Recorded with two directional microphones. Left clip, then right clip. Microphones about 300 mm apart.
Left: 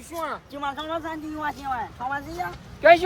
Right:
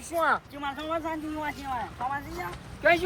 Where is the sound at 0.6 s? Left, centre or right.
Centre.